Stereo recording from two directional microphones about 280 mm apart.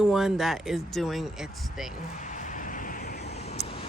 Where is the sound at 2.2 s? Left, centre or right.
Left.